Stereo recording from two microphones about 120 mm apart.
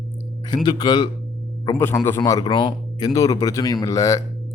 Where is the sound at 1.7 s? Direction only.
20° left (ahead or behind).